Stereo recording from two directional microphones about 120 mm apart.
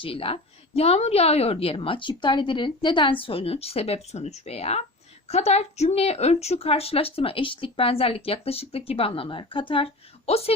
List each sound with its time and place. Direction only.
0.0 s a woman's voice: 50° left (ahead or behind)